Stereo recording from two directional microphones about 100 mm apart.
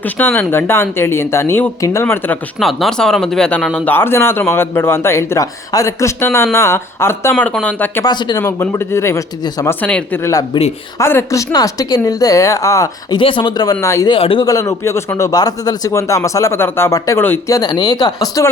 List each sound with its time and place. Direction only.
0.0 s speech: 20° left (ahead or behind)
2.6 s speech: centre (ahead or behind)
3.8 s speech: 20° left (ahead or behind)
7.3 s speech: 15° left (ahead or behind)
8.0 s speech: 45° left (ahead or behind)
8.4 s speech: 25° left (ahead or behind)
9.8 s speech: 15° left (ahead or behind)
10.5 s speech: 50° left (ahead or behind)
10.9 s speech: 25° left (ahead or behind)
13.1 s speech: 55° left (ahead or behind)
13.8 s speech: 30° left (ahead or behind)
14.1 s a man's voice: 60° left (ahead or behind)
14.4 s speech: 35° left (ahead or behind)
17.5 s speech: 45° left (ahead or behind)